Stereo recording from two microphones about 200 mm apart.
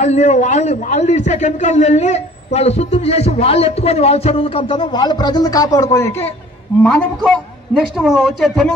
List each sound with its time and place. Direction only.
0.0 s a man's voice: 35° left (ahead or behind); by 8.7 s centre (ahead or behind)